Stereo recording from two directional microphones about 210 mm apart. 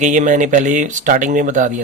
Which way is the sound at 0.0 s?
35° right (ahead or behind).